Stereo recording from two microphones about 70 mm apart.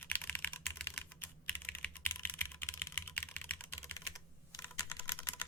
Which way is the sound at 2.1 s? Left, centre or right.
Left.